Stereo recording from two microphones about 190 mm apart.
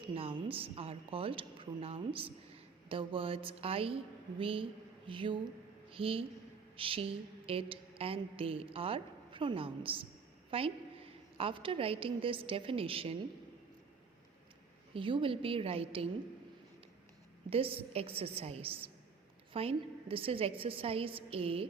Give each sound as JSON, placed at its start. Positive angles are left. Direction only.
{"t": 0.1, "sound": "a woman's voice", "side_deg": -30}
{"t": 6.7, "sound": "a sound", "side_deg": -30}
{"t": 7.4, "sound": "a woman's voice", "side_deg": -30}
{"t": 14.9, "sound": "a woman's voice", "side_deg": -25}
{"t": 17.5, "sound": "a woman's voice", "side_deg": -30}